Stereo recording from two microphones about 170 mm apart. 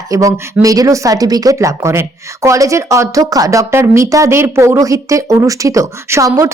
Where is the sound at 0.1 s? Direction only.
20° right (ahead or behind).